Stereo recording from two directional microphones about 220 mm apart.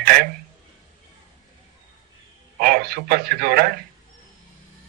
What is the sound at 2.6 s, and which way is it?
Speech, 45° right (ahead or behind).